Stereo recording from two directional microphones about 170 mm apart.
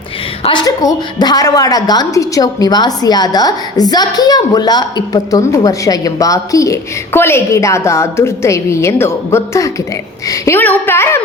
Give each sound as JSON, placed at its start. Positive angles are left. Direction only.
{"t": 0.4, "sound": "a woman's voice", "side_deg": 25}